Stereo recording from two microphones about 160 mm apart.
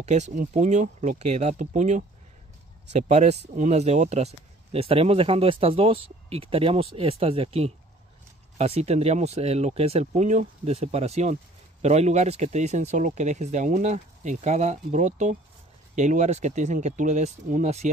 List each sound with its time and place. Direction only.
0.0 s speech: 45° right (ahead or behind)